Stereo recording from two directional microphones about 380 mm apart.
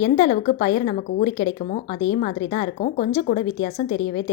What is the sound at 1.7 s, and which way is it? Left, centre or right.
Speech, left.